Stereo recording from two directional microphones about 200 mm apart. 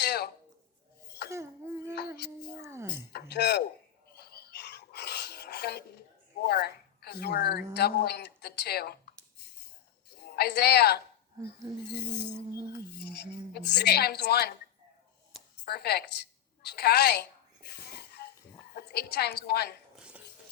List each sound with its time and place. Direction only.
0.0 s a sound: 55° left (ahead or behind)
1.3 s a child's voice: 15° right (ahead or behind)
3.1 s a woman's voice: 55° left (ahead or behind)
4.1 s a sound: 55° left (ahead or behind)
6.4 s a woman's voice: 55° left (ahead or behind)
10.2 s speech: 55° left (ahead or behind)
12.0 s a woman's voice: 60° left (ahead or behind)
13.5 s a woman's voice: 55° left (ahead or behind)
15.6 s a sound: 55° left (ahead or behind)
18.7 s a woman's voice: 50° left (ahead or behind)
20.0 s dishes: 5° right (ahead or behind)